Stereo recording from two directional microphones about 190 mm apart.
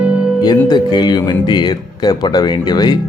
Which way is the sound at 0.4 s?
20° left (ahead or behind).